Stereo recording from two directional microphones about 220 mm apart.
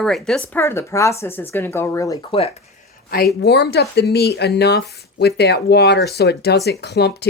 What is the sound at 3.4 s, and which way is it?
Speech, 50° left (ahead or behind).